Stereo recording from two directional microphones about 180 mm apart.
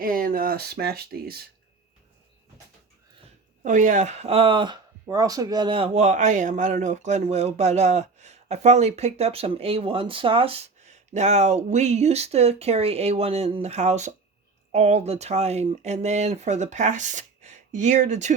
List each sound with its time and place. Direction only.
0.0 s speech: 50° right (ahead or behind)
3.6 s speech: 45° right (ahead or behind)